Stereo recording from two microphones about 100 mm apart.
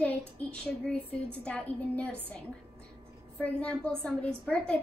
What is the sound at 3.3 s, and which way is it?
A woman's voice, 15° left (ahead or behind).